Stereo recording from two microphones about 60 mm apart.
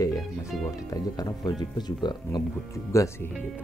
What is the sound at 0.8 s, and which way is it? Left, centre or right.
Speech, left.